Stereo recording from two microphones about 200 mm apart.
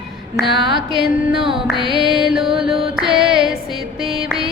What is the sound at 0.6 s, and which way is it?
Music, 25° right (ahead or behind).